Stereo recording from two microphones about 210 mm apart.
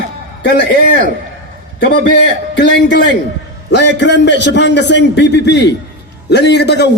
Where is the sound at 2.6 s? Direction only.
55° left (ahead or behind).